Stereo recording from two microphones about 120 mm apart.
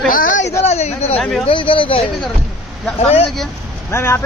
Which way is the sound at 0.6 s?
65° left (ahead or behind).